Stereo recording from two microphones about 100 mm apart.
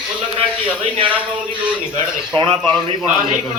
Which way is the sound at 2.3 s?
50° right (ahead or behind).